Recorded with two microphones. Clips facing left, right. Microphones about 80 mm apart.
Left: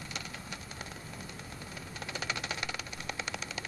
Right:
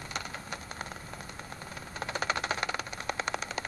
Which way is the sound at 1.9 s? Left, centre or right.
Right.